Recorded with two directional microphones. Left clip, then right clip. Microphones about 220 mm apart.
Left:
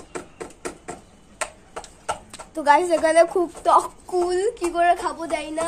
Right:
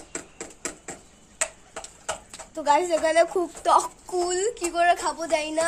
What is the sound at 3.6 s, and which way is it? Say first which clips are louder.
A woman's voice: left 2 dB; 10° right (ahead or behind).